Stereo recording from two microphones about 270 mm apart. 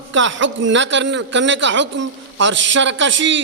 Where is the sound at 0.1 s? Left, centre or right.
Right.